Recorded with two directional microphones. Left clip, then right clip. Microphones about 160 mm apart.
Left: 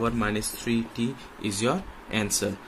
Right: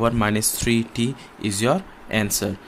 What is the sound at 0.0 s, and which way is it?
Speech, 50° right (ahead or behind).